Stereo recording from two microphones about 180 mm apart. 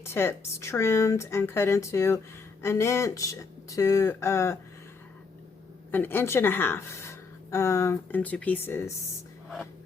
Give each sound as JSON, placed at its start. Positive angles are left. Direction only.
{"t": 0.0, "sound": "speech", "side_deg": 15}
{"t": 5.9, "sound": "speech", "side_deg": 10}